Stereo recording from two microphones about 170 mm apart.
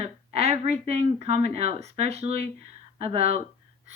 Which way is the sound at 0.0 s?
40° right (ahead or behind).